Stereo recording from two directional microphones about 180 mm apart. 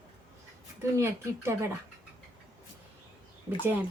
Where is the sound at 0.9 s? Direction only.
15° right (ahead or behind).